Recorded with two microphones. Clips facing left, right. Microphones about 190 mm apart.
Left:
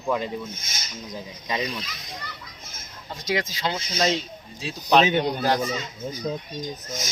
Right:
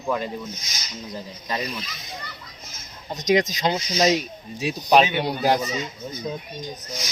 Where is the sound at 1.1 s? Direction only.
15° left (ahead or behind).